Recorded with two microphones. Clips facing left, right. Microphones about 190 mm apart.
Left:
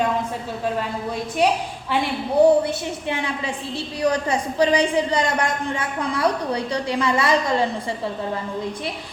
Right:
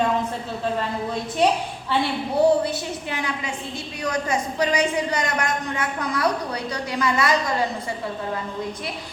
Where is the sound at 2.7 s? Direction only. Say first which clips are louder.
Left 2 dB; 25° left (ahead or behind).